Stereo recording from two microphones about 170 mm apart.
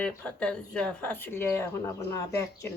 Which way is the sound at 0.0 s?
5° left (ahead or behind).